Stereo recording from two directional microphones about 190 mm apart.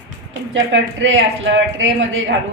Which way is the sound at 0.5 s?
80° right.